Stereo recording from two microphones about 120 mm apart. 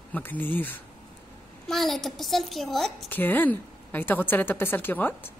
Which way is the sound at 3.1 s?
15° left (ahead or behind).